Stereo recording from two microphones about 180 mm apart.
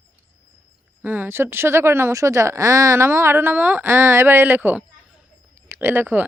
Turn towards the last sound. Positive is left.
turn(degrees=-10)  # may be behind; listen again after turning